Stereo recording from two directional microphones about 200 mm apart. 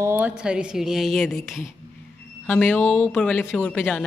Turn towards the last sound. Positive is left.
turn(degrees=10)  # may be behind; listen again after turning